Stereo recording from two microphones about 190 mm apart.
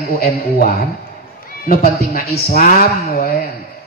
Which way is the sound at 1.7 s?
50° left (ahead or behind).